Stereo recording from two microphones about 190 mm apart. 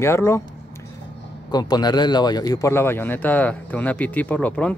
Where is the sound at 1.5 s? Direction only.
20° left (ahead or behind).